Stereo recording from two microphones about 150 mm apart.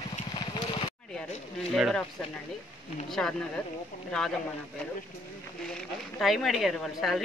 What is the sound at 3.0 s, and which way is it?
A woman's voice, 5° left (ahead or behind).